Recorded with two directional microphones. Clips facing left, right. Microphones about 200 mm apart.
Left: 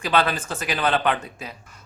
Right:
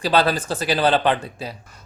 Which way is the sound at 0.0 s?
35° right (ahead or behind).